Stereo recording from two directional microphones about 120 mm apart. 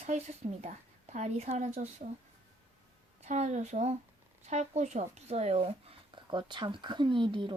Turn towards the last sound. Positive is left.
turn(degrees=-40)  # may be behind; listen again after turning